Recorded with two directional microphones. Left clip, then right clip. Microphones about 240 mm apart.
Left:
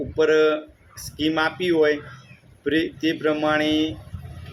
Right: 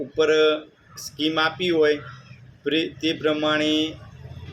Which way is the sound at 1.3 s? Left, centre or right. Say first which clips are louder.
Even; centre.